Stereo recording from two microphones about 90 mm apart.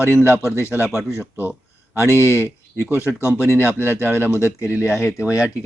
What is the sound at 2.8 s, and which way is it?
Speech, 20° right (ahead or behind).